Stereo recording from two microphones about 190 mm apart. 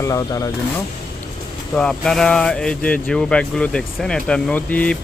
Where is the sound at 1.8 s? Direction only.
5° left (ahead or behind).